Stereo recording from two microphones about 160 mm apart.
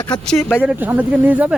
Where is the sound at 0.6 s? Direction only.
10° right (ahead or behind).